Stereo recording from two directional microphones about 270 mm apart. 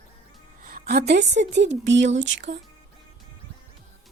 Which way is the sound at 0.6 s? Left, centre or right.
Right.